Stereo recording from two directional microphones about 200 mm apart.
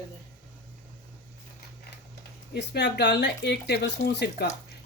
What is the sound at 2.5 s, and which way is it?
Speech, 55° left (ahead or behind).